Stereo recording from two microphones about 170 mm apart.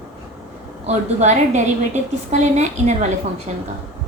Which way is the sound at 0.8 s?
45° right (ahead or behind).